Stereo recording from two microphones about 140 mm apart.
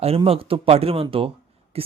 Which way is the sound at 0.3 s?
40° right (ahead or behind).